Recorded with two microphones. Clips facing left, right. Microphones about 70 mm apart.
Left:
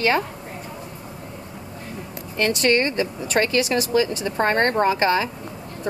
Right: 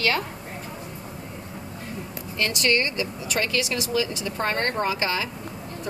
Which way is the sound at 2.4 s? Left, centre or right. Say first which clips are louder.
Left 4 dB; left.